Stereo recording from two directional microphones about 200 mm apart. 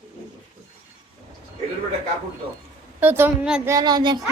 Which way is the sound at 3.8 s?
20° right (ahead or behind).